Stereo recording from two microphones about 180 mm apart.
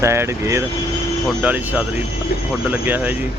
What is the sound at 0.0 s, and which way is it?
Speech, 15° right (ahead or behind).